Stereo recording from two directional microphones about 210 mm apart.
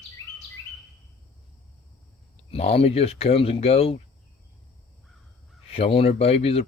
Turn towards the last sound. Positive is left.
turn(degrees=30)  # may be behind; listen again after turning